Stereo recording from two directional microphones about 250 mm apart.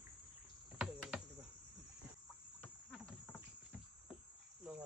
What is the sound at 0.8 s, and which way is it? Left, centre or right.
Speech, centre.